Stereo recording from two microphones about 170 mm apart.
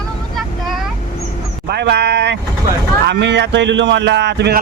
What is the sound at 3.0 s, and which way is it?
Speech, 90° right.